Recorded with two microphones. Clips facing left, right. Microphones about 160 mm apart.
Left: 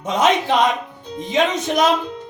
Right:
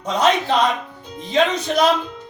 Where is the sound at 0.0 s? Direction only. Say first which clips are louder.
Left 1 dB; 20° left (ahead or behind).